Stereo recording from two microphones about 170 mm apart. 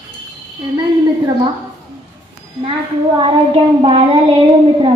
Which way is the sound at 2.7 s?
30° right (ahead or behind).